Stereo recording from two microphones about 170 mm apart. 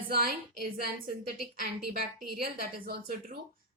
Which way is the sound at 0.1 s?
60° right (ahead or behind).